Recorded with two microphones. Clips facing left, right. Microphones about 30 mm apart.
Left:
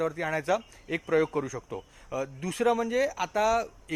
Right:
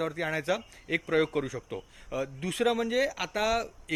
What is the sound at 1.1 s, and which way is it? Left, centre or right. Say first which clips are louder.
Speech: left 2 dB; right.